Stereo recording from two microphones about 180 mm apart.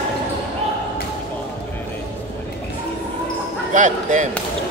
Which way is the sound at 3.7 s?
45° right (ahead or behind).